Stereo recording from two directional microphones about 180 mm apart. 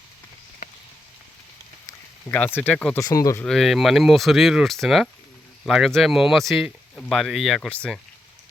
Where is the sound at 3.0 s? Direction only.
20° left (ahead or behind).